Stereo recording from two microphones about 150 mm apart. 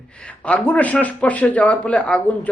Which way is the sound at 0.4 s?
10° left (ahead or behind).